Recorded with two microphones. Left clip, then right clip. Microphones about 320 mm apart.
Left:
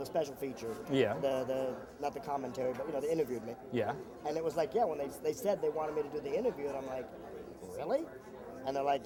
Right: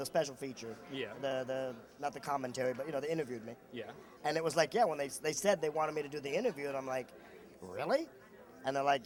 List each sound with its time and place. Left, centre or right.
0.0 s a man's voice: right
0.9 s speech: left
1.2 s a man's voice: right
3.7 s speech: left
4.2 s a man's voice: right